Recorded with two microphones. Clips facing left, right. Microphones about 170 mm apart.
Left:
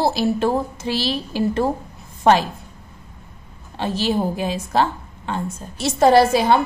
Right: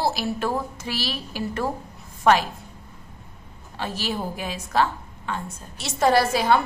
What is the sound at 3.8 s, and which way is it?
A woman's voice, 25° left (ahead or behind).